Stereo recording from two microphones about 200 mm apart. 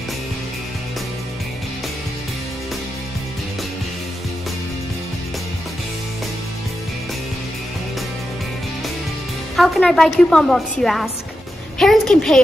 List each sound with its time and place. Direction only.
9.6 s a woman's voice: centre (ahead or behind)